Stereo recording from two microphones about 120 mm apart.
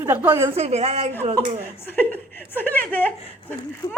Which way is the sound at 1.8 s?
15° left (ahead or behind).